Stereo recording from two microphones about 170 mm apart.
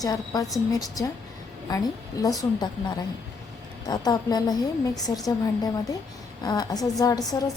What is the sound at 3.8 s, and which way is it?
A woman's voice, 25° left (ahead or behind).